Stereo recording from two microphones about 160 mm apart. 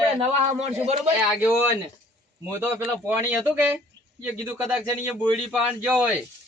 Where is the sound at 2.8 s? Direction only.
10° right (ahead or behind).